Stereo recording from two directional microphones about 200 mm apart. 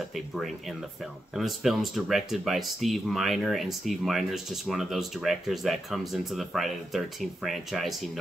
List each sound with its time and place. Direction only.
0.1 s speech: centre (ahead or behind)